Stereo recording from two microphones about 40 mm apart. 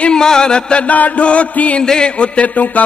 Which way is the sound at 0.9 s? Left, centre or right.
Left.